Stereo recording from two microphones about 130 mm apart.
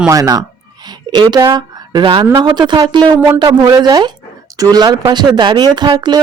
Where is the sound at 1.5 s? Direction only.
30° right (ahead or behind).